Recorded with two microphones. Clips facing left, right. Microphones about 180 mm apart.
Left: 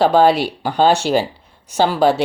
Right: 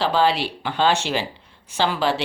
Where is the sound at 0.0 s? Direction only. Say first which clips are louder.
Left 7 dB; 50° left (ahead or behind).